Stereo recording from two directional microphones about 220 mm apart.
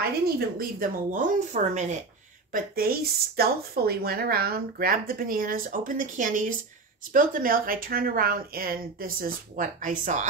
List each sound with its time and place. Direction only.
0.6 s a woman's voice: 40° right (ahead or behind)